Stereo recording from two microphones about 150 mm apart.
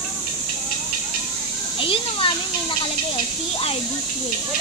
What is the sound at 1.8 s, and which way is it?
Children playing, 35° left (ahead or behind).